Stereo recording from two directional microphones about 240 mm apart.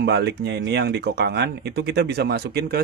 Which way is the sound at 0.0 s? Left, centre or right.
Right.